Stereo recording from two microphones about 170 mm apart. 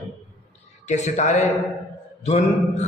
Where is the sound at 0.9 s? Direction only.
40° left (ahead or behind).